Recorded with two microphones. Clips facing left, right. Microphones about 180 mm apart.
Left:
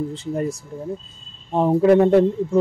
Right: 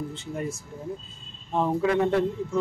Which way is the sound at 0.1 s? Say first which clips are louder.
Left 7 dB; 35° left (ahead or behind).